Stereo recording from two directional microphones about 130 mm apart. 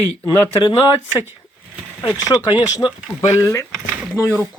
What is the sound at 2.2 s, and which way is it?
Speech, 25° left (ahead or behind).